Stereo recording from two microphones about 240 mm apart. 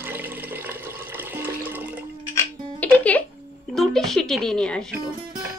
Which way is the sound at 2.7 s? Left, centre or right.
Centre.